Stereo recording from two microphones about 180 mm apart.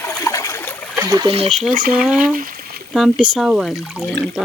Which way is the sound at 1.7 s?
50° right (ahead or behind).